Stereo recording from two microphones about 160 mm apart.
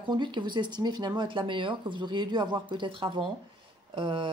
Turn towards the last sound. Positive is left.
turn(degrees=-35)  # may be behind; listen again after turning